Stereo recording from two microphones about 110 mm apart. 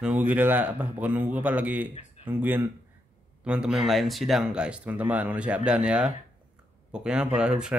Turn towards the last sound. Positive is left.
turn(degrees=-10)  # may be behind; listen again after turning